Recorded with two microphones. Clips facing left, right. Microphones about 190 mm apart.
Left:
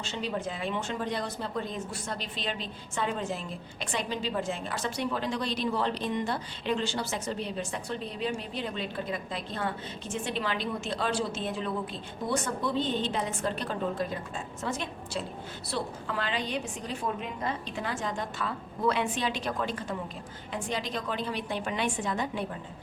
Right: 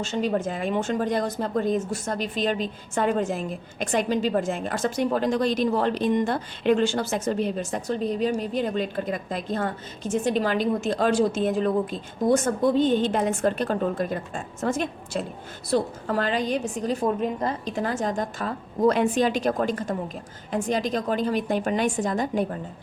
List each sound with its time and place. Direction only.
0.0 s a woman's voice: 45° right (ahead or behind)